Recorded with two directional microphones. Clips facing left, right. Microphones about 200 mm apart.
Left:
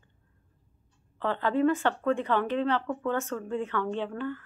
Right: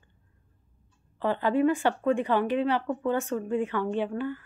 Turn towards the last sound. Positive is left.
turn(degrees=-10)  # may be behind; listen again after turning